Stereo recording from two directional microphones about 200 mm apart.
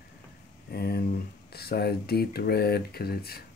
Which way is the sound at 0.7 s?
50° left (ahead or behind).